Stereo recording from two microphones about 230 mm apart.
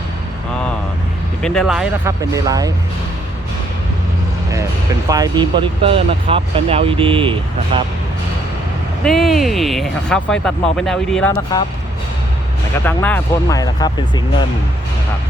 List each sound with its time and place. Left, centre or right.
1.4 s speech: centre
2.3 s speech: centre
5.0 s speech: centre
9.0 s speech: centre
12.8 s speech: centre